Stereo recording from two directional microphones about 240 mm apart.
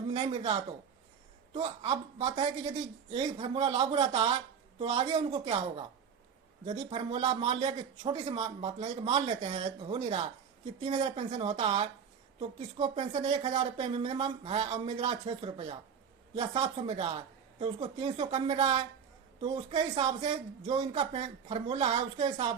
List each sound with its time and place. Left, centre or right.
0.1 s a man's voice: right